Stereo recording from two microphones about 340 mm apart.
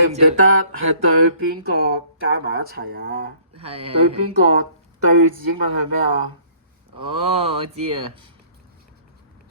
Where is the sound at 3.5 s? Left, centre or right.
Centre.